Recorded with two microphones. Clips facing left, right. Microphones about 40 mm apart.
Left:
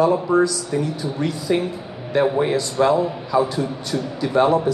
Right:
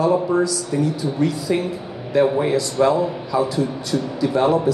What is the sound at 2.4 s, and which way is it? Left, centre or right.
A man's voice, left.